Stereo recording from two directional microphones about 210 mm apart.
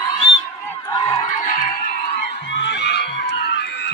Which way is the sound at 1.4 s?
40° left (ahead or behind).